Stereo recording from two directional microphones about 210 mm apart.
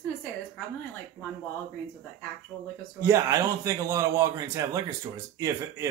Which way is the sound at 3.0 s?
15° right (ahead or behind).